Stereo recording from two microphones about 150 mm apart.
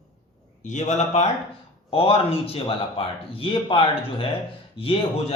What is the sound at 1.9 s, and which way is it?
A man's voice, 40° left (ahead or behind).